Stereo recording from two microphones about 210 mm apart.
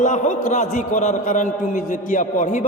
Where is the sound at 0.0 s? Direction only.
35° left (ahead or behind).